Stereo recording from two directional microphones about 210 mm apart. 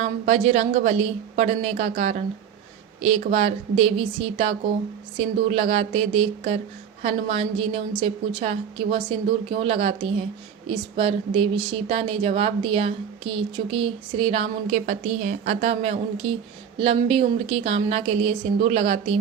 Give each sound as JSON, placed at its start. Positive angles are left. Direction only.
{"t": 0.0, "sound": "a woman's voice", "side_deg": -30}